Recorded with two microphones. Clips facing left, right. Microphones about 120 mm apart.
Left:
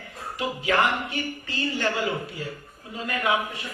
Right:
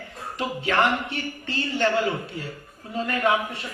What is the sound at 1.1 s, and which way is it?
Speech, 30° right (ahead or behind).